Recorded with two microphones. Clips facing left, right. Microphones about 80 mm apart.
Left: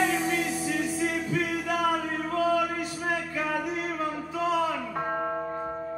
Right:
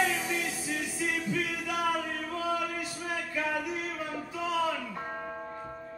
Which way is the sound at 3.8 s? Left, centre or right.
Left.